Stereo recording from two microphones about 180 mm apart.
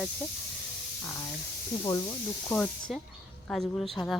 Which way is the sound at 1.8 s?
20° left (ahead or behind).